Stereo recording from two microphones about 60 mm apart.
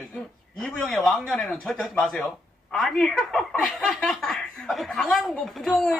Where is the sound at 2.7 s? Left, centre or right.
Centre.